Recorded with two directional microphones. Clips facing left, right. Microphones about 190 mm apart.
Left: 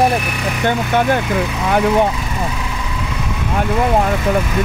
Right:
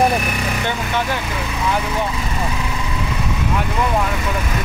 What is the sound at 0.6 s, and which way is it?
Speech, 50° left (ahead or behind).